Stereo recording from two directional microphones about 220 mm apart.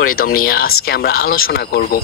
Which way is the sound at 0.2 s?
40° left (ahead or behind).